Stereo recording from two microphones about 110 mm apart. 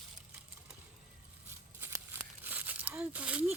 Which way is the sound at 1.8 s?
20° right (ahead or behind).